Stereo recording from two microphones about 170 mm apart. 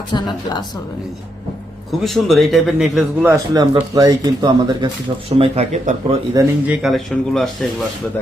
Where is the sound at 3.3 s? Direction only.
20° right (ahead or behind); by 6.2 s 40° right (ahead or behind).